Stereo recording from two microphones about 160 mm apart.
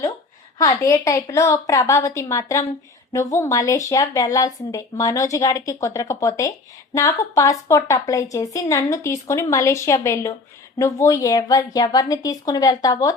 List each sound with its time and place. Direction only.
0.6 s speech: 20° left (ahead or behind)